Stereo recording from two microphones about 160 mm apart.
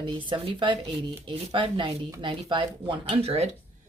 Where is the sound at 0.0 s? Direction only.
30° right (ahead or behind).